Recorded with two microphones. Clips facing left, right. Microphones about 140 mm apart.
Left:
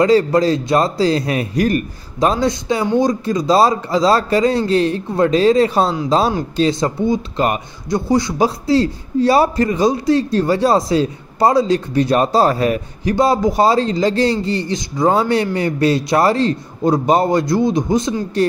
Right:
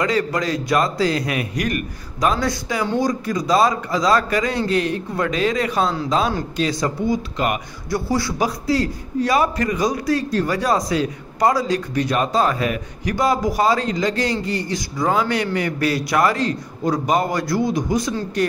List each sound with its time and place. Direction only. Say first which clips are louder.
0.0 s speech: left 8 dB; 30° left (ahead or behind)
7.9 s speech: left 5 dB; 20° left (ahead or behind)